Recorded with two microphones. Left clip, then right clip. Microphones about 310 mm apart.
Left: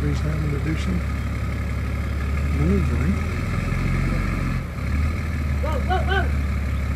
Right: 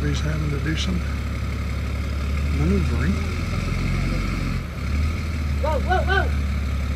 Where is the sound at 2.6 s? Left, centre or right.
Centre.